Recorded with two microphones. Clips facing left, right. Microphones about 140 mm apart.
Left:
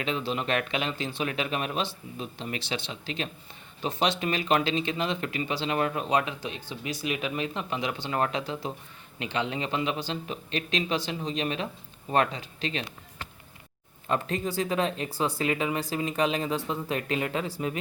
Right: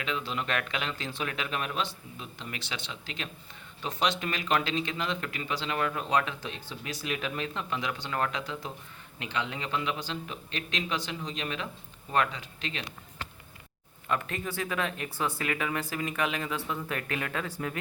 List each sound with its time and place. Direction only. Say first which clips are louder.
0.0 s speech: left 4 dB; 25° left (ahead or behind)
14.1 s speech: left 4 dB; 25° left (ahead or behind)